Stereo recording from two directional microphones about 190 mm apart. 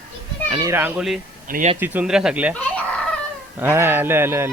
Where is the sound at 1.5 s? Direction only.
40° right (ahead or behind).